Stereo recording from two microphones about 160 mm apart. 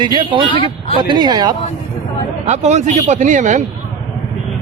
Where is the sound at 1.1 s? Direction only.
30° right (ahead or behind).